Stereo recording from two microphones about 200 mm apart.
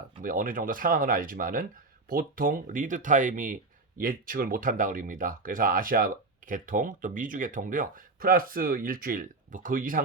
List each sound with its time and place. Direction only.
0.2 s speech: 45° right (ahead or behind)